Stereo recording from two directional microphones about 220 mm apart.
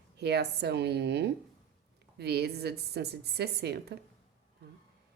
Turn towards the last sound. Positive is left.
turn(degrees=-50)  # may be behind; listen again after turning